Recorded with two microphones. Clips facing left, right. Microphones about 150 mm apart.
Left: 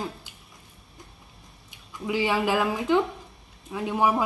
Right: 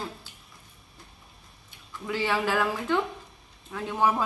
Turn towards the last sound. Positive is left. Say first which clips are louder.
# left 2 dB
turn(degrees=15)  # may be behind; listen again after turning